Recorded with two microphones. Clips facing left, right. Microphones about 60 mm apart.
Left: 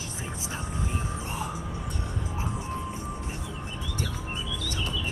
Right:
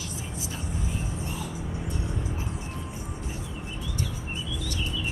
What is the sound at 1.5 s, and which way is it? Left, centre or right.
Music, left.